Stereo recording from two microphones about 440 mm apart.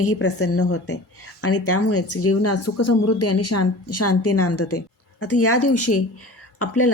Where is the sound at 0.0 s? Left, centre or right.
Left.